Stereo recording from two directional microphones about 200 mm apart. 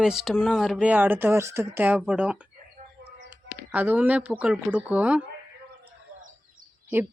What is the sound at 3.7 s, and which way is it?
Speech, 10° right (ahead or behind).